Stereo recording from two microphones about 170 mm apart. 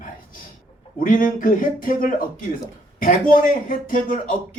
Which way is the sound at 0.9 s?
55° left (ahead or behind).